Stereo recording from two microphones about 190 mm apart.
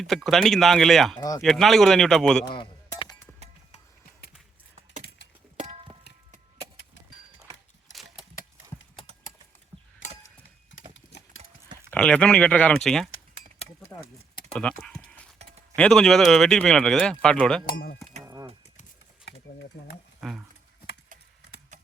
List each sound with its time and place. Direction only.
0.0 s speech: centre (ahead or behind)
2.5 s a sound: 25° left (ahead or behind)
5.5 s music: 35° right (ahead or behind)
10.9 s clip-clop: 85° left
11.9 s speech: 5° left (ahead or behind)
14.5 s typing: 5° left (ahead or behind)
15.7 s speech: 5° left (ahead or behind)
19.5 s speech: 60° left (ahead or behind)
20.2 s speech: centre (ahead or behind)